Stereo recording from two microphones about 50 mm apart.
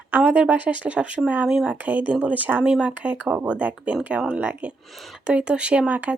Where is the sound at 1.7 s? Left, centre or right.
Right.